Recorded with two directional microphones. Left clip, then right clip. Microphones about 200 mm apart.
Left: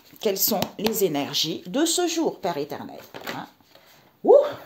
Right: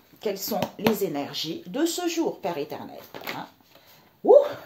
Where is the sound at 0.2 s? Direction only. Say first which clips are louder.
Left 4 dB; 45° left (ahead or behind).